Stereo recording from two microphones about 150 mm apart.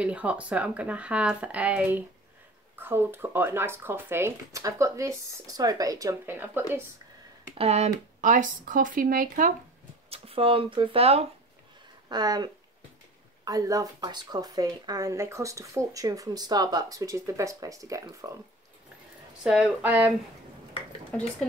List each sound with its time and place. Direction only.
0.0 s speech: 10° right (ahead or behind)
7.5 s speech: 45° right (ahead or behind); by 9.5 s 65° right (ahead or behind)
10.0 s speech: 40° right (ahead or behind)
12.1 s speech: 25° right (ahead or behind)
13.5 s speech: 25° right (ahead or behind)
19.4 s speech: 5° right (ahead or behind)